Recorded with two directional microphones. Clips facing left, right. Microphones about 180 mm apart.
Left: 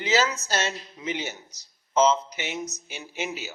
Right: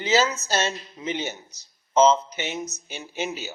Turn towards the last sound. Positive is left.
turn(degrees=-30)  # may be behind; listen again after turning